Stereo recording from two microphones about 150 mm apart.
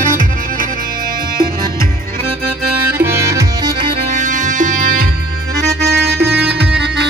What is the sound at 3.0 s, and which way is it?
Music, 20° right (ahead or behind).